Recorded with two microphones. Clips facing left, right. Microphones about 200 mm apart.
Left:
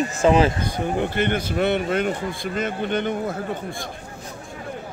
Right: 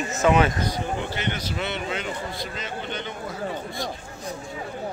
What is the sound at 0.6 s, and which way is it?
Speech, 55° left (ahead or behind).